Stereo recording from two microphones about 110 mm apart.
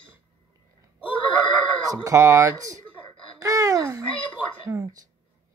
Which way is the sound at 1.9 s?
30° right (ahead or behind).